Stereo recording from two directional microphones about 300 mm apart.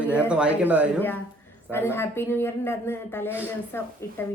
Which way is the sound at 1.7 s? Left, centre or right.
Centre.